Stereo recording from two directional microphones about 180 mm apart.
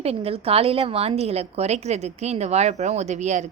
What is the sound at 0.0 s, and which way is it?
A woman's voice, 35° right (ahead or behind).